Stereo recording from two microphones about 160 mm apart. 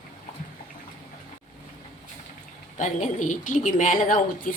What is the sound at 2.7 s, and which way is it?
A woman's voice, 50° left (ahead or behind).